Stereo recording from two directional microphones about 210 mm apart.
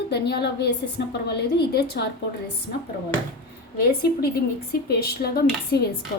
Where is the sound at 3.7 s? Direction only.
50° left (ahead or behind).